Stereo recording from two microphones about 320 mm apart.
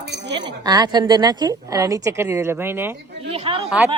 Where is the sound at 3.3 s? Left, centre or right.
Centre.